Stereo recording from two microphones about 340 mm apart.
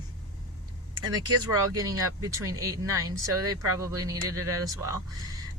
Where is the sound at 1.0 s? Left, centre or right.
Right.